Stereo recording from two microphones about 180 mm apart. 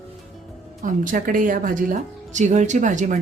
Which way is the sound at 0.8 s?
50° right (ahead or behind).